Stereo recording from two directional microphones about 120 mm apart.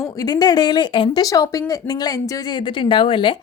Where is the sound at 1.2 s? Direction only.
30° left (ahead or behind); by 3.3 s 45° left (ahead or behind).